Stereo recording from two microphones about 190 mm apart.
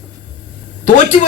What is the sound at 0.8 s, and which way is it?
Speech, 40° left (ahead or behind).